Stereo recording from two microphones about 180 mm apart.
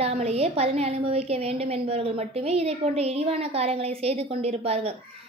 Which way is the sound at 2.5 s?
35° right (ahead or behind).